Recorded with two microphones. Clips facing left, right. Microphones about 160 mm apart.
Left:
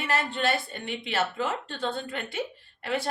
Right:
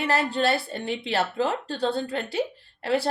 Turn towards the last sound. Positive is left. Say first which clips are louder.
# right 5 dB
turn(degrees=-35)  # may be behind; listen again after turning